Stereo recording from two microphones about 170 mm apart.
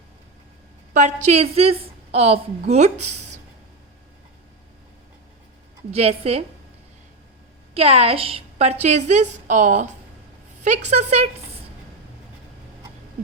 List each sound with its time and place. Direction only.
0.9 s a woman's voice: 45° right (ahead or behind)
5.9 s a woman's voice: 40° right (ahead or behind)
7.7 s a woman's voice: 35° right (ahead or behind)